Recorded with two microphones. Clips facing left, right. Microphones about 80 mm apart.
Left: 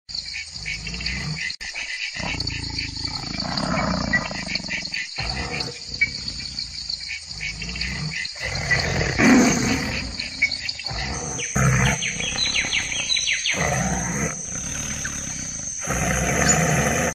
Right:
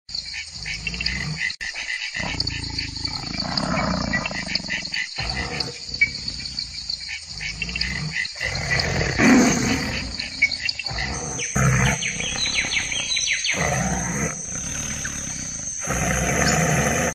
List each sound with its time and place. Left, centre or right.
1.0 s dog: right
3.3 s wild animals: centre
4.6 s wild animals: right
8.5 s roar: centre
11.1 s wild animals: centre
15.9 s roar: centre